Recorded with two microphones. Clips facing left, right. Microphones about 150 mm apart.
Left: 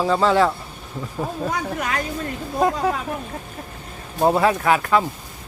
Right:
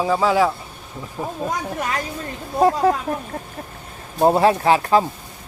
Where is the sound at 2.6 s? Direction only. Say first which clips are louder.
Right 4 dB; 30° right (ahead or behind).